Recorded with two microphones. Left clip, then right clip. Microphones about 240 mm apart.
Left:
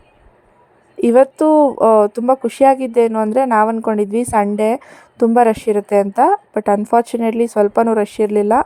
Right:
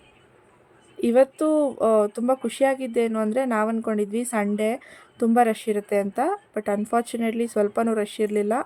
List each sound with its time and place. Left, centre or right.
0.9 s speech: left